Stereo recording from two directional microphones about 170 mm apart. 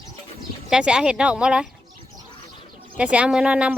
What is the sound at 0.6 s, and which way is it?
Speech, 5° right (ahead or behind).